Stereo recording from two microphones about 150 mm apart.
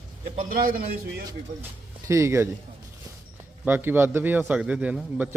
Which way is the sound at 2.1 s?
20° right (ahead or behind).